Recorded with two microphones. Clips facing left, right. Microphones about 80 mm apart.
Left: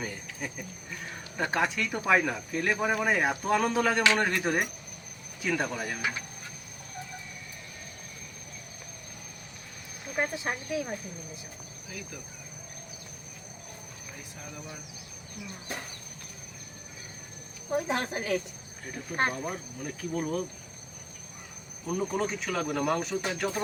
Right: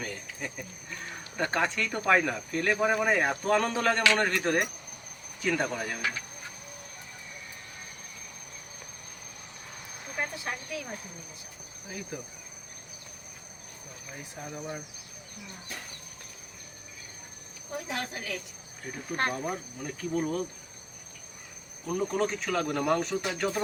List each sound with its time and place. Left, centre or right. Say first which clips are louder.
0.0 s speech: even; centre
10.2 s speech: left 4 dB; left
11.9 s cricket: right 4 dB; right
14.3 s speech: right 7 dB; right
17.7 s speech: left 6 dB; left
19.4 s speech: right 1 dB; centre
21.8 s speech: right 1 dB; centre